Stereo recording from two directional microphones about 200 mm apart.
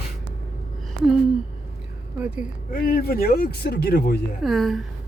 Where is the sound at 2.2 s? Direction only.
5° right (ahead or behind).